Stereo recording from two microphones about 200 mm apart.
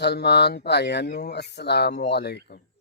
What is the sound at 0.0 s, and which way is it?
A man's voice, 55° left (ahead or behind).